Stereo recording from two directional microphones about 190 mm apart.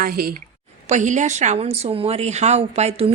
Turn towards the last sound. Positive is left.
turn(degrees=-35)  # may be behind; listen again after turning